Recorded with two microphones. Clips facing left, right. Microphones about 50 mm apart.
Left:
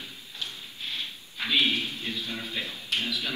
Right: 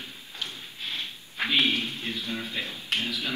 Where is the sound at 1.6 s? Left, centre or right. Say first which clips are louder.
Left 1 dB; right.